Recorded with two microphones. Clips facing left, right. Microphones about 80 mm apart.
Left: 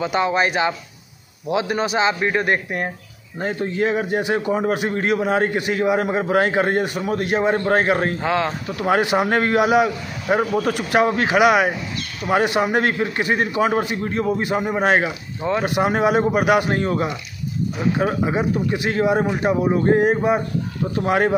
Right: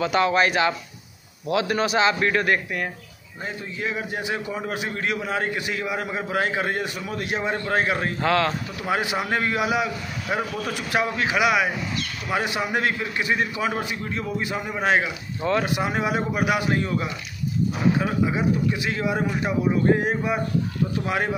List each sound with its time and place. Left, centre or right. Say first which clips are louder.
0.0 s a man's voice: left 1 dB; centre
3.3 s a man's voice: left 10 dB; left
8.2 s speech: left 1 dB; centre
8.7 s a man's voice: left 11 dB; left
10.3 s a man's voice: left 8 dB; left